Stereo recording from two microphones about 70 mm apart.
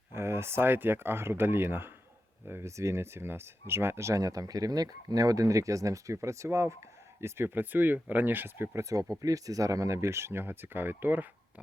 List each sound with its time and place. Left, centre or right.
0.1 s speech: right
8.8 s speech: right